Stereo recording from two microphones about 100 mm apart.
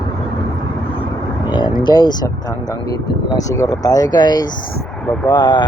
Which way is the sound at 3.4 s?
35° left (ahead or behind).